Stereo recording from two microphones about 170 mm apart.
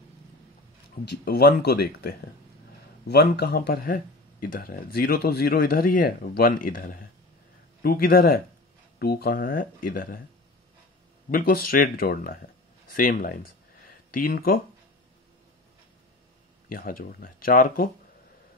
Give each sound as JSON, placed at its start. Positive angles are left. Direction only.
{"t": 1.2, "sound": "speech", "side_deg": 70}
{"t": 11.2, "sound": "speech", "side_deg": 60}
{"t": 16.6, "sound": "speech", "side_deg": 60}